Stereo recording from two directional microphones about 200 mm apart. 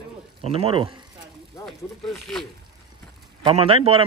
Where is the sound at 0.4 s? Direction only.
30° right (ahead or behind).